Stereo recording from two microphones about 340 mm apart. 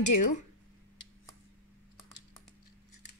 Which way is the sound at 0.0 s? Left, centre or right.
Left.